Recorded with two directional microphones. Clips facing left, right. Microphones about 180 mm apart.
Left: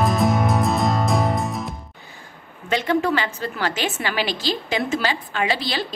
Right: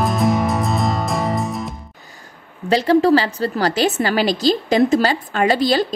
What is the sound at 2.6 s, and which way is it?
Speech, 35° right (ahead or behind).